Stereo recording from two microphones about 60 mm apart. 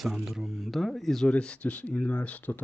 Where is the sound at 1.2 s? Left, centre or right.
Centre.